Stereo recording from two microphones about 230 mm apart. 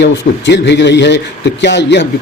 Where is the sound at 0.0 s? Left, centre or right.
Left.